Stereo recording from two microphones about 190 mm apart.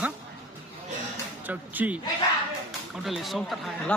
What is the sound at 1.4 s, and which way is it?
Speech, 10° right (ahead or behind).